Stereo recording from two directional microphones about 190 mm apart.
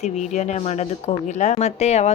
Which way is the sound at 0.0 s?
35° left (ahead or behind).